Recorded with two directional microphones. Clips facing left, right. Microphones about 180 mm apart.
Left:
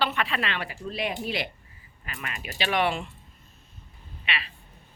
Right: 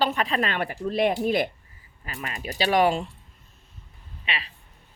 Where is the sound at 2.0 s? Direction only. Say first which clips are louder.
Right 4 dB; 35° right (ahead or behind).